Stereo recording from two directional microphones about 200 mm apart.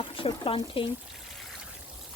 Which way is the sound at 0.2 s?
25° left (ahead or behind).